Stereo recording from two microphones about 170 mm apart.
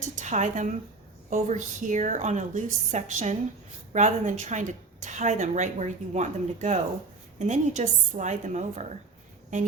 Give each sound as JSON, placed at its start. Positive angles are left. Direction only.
{"t": 0.2, "sound": "a woman's voice", "side_deg": -45}